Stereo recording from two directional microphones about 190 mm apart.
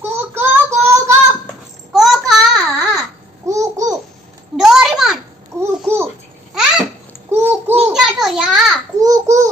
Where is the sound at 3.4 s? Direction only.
15° right (ahead or behind).